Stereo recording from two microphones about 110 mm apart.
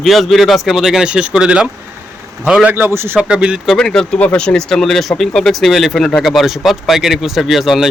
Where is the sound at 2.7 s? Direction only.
20° right (ahead or behind).